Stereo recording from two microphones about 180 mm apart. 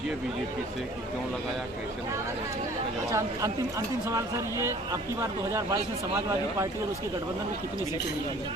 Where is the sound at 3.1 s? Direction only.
15° right (ahead or behind).